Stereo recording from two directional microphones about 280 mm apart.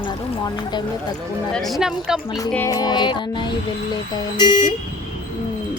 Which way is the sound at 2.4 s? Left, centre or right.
Centre.